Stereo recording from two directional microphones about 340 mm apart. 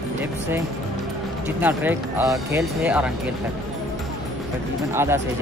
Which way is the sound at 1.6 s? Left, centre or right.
Centre.